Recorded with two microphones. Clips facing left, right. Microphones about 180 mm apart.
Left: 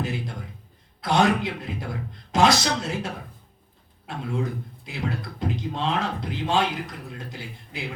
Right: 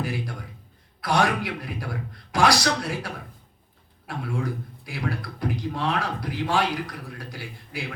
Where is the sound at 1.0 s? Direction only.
20° left (ahead or behind).